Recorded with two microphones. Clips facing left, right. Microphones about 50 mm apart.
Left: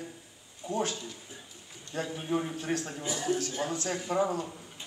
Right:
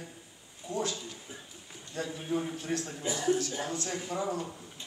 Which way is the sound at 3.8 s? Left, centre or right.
Left.